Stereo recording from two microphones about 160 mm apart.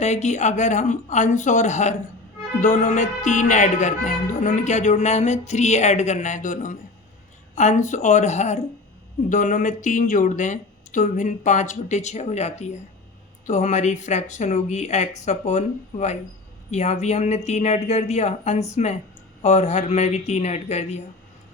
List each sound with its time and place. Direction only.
0.0 s speech: 45° left (ahead or behind)